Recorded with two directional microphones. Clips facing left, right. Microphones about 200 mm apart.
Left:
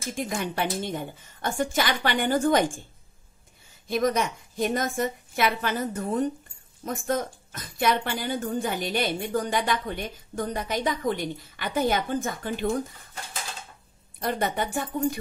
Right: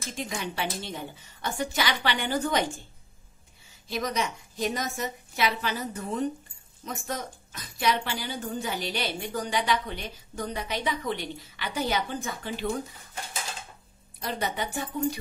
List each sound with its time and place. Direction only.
0.1 s a woman's voice: 50° left (ahead or behind)
3.8 s a woman's voice: 50° left (ahead or behind)
14.2 s a woman's voice: 50° left (ahead or behind)